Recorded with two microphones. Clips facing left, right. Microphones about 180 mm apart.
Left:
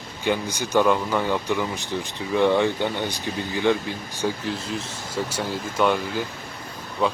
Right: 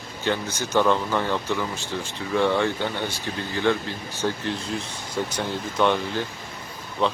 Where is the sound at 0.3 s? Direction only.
15° left (ahead or behind).